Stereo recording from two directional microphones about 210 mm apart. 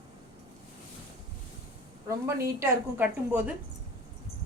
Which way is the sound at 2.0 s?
15° right (ahead or behind).